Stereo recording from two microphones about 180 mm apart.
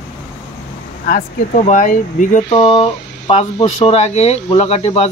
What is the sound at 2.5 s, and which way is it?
Speech, 30° left (ahead or behind).